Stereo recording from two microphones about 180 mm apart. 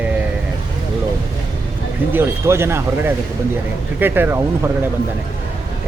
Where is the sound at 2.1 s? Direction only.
15° right (ahead or behind).